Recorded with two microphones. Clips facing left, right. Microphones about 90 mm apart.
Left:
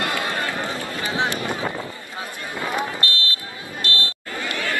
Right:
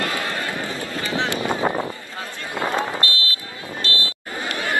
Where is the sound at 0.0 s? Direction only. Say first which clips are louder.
Left 1 dB; 15° left (ahead or behind).